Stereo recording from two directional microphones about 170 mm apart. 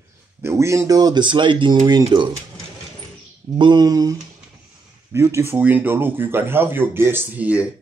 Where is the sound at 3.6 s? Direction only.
25° right (ahead or behind).